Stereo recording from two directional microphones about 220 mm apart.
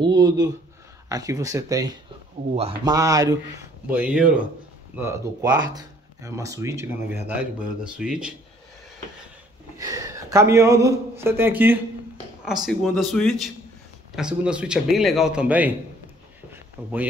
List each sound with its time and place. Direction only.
0.0 s a man's voice: 20° right (ahead or behind)
9.8 s a man's voice: 15° right (ahead or behind)